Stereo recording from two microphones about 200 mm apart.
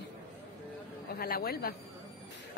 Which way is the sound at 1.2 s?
50° left (ahead or behind).